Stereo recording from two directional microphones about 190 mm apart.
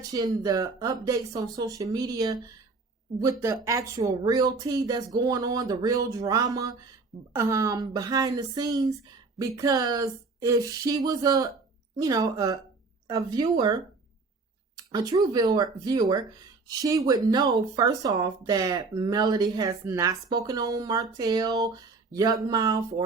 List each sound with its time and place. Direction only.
0.1 s speech: 20° right (ahead or behind)